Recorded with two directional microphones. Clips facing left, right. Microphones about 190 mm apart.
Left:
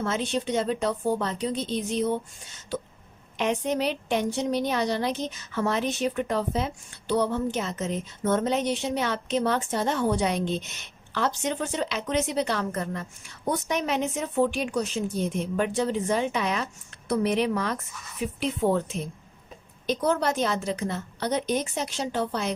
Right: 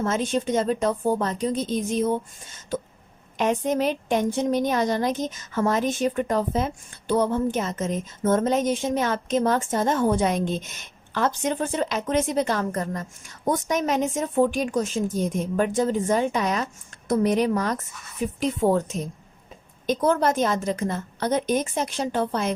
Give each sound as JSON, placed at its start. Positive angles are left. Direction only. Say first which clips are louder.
{"t": 0.0, "sound": "a woman's voice", "louder": "right 3 dB", "side_deg": -45}